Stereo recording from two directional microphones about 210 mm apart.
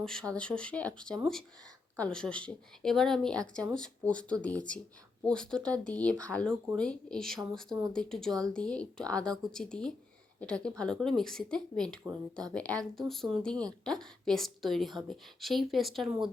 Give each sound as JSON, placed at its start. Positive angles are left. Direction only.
{"t": 0.0, "sound": "a woman's voice", "side_deg": 5}
{"t": 12.0, "sound": "speech", "side_deg": -15}
{"t": 12.5, "sound": "a woman's voice", "side_deg": 5}